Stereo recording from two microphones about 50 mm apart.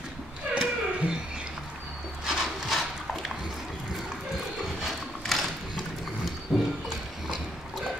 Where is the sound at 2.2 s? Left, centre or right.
Centre.